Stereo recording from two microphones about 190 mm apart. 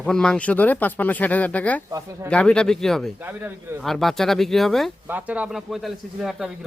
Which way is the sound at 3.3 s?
10° right (ahead or behind).